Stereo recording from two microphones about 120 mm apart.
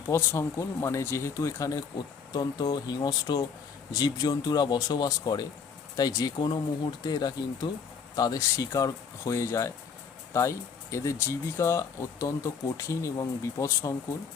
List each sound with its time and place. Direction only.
0.1 s speech: 25° left (ahead or behind)